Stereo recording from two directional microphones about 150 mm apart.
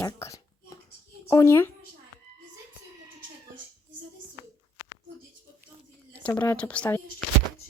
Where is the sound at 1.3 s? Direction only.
20° left (ahead or behind).